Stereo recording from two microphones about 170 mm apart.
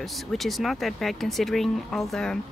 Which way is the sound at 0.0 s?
Centre (ahead or behind).